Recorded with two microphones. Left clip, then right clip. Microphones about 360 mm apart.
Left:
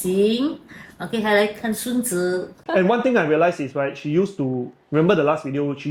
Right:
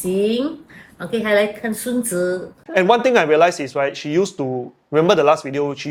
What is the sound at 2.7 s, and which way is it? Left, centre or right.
Speech, right.